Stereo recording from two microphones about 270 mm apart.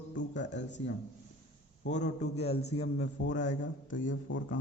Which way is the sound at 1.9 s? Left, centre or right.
Left.